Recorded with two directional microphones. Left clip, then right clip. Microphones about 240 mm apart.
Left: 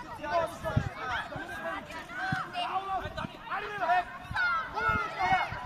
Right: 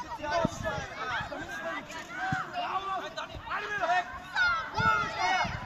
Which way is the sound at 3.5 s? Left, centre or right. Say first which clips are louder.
Even; right.